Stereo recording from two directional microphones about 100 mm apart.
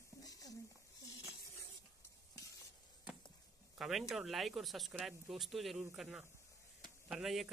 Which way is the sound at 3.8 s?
5° right (ahead or behind).